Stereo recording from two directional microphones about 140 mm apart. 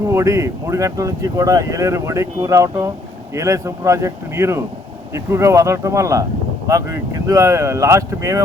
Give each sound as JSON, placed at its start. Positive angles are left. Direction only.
{"t": 0.1, "sound": "speech", "side_deg": -20}